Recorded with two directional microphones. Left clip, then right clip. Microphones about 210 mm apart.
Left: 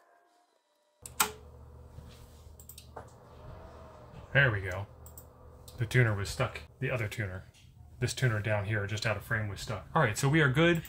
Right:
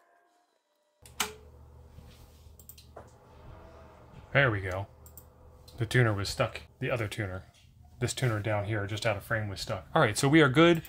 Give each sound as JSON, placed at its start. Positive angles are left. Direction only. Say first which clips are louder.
{"t": 4.3, "sound": "speech", "louder": "right 1 dB", "side_deg": -45}